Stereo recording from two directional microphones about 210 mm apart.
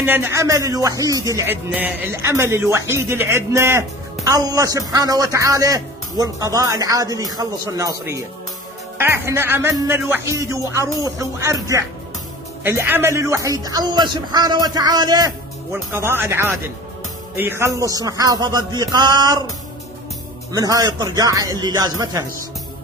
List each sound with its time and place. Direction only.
0.0 s speech: 10° right (ahead or behind)
20.5 s speech: 15° right (ahead or behind)